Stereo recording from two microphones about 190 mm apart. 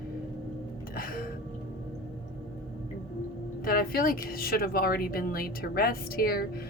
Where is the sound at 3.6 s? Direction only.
50° left (ahead or behind).